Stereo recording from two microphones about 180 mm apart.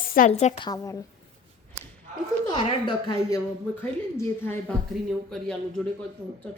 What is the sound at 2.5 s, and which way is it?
Speech, 25° left (ahead or behind).